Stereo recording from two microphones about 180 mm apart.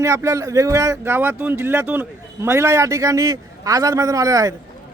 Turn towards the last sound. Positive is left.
turn(degrees=-20)  # may be behind; listen again after turning